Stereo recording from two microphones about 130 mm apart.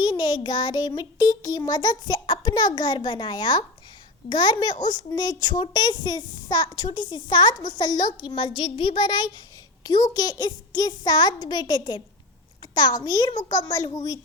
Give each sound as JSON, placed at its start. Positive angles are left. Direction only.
{"t": 0.0, "sound": "child singing", "side_deg": 35}